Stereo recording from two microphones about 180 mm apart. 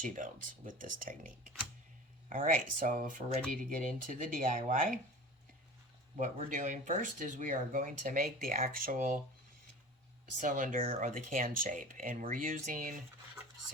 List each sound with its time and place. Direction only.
0.0 s speech: 45° right (ahead or behind)
2.3 s speech: 50° right (ahead or behind)
6.1 s speech: 45° right (ahead or behind)
10.4 s speech: 45° right (ahead or behind)